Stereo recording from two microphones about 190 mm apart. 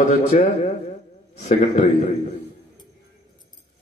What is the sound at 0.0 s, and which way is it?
A man's voice, 40° left (ahead or behind).